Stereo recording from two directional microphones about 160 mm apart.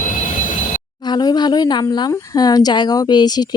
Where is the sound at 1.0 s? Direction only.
25° left (ahead or behind).